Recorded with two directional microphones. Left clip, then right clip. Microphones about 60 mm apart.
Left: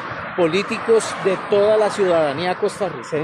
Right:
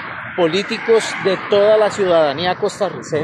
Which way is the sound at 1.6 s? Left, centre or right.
Left.